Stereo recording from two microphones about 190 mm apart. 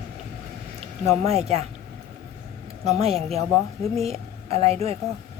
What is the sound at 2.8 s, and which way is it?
Speech, 35° right (ahead or behind).